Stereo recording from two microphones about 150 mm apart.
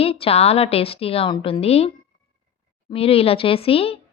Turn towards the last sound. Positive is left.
turn(degrees=40)  # may be behind; listen again after turning